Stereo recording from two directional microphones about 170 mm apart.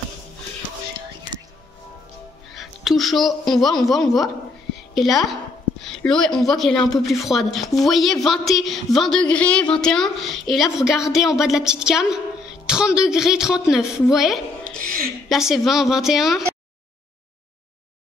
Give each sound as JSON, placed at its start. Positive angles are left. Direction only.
{"t": 2.5, "sound": "a woman's voice", "side_deg": 0}
{"t": 14.8, "sound": "a sound", "side_deg": -55}
{"t": 15.2, "sound": "speech", "side_deg": 0}